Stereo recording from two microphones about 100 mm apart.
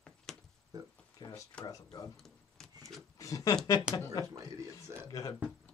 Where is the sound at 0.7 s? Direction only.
40° right (ahead or behind).